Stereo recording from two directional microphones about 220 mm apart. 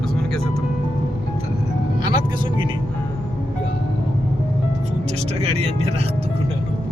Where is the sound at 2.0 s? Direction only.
20° right (ahead or behind).